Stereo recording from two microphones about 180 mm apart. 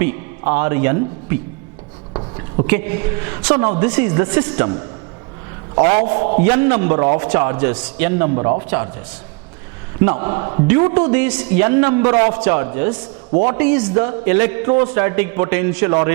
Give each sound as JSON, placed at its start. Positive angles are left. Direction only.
{"t": 0.0, "sound": "a man's voice", "side_deg": -15}
{"t": 2.6, "sound": "a man's voice", "side_deg": -15}
{"t": 5.8, "sound": "a man's voice", "side_deg": -50}
{"t": 6.4, "sound": "a man's voice", "side_deg": -15}
{"t": 10.0, "sound": "speech", "side_deg": -15}
{"t": 10.7, "sound": "a man's voice", "side_deg": -15}
{"t": 12.0, "sound": "a man's voice", "side_deg": -45}
{"t": 12.3, "sound": "a man's voice", "side_deg": -15}